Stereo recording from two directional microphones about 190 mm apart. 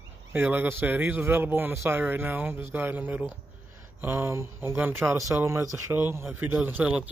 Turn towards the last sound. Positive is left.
turn(degrees=-5)  # may be behind; listen again after turning